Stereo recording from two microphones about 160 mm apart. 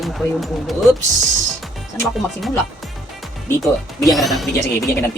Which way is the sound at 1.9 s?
15° left (ahead or behind).